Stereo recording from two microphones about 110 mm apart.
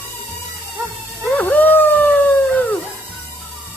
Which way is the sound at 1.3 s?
15° left (ahead or behind).